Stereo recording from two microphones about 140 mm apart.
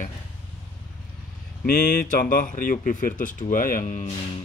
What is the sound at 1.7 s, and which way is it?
Speech, 70° left (ahead or behind).